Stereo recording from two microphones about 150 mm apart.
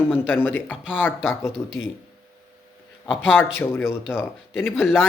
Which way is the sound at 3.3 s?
15° left (ahead or behind).